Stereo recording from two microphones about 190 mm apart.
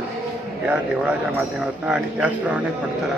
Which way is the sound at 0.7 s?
5° right (ahead or behind).